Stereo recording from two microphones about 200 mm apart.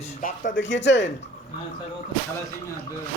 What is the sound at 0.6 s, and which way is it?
Speech, 65° left (ahead or behind).